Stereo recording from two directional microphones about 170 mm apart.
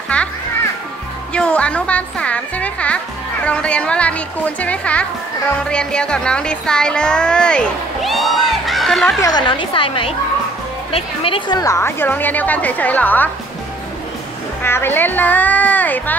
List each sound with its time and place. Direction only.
0.1 s a child's voice: 5° left (ahead or behind)
1.3 s a woman's voice: 5° left (ahead or behind)
9.2 s a woman's voice: 25° left (ahead or behind); by 13.3 s 10° left (ahead or behind)
14.6 s a woman's voice: 15° left (ahead or behind)